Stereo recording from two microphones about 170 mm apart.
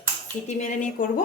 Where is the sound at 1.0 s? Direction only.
55° left (ahead or behind).